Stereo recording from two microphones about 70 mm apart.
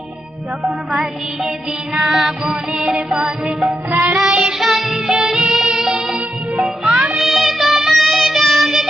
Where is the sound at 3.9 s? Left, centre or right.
Right.